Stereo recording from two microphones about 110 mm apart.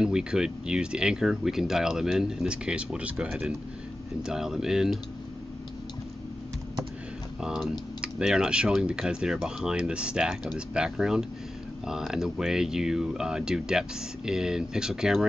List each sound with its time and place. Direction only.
0.0 s speech: 5° right (ahead or behind)
7.4 s speech: 5° right (ahead or behind)